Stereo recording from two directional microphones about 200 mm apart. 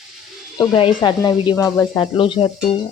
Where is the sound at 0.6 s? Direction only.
25° left (ahead or behind).